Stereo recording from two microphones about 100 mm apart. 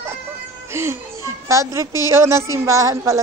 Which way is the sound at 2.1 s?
25° right (ahead or behind).